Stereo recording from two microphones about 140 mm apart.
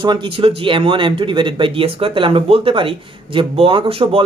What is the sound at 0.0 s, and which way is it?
Speech, 35° right (ahead or behind).